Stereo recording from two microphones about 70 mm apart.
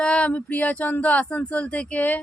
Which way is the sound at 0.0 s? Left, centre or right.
Centre.